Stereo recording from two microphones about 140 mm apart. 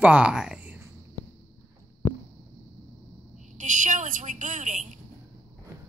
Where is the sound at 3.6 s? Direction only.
65° right (ahead or behind).